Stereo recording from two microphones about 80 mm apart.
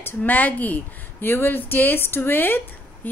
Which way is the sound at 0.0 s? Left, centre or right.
Left.